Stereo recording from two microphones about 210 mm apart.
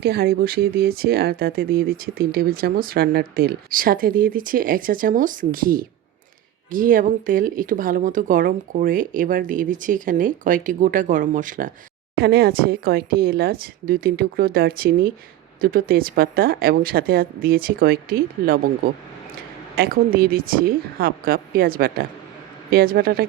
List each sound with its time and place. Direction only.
0.0 s speech: 50° right (ahead or behind)
19.7 s speech: 45° right (ahead or behind)